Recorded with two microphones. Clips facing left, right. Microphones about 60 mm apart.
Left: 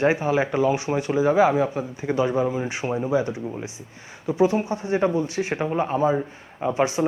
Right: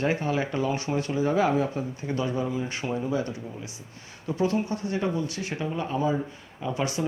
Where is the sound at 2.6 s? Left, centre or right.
Centre.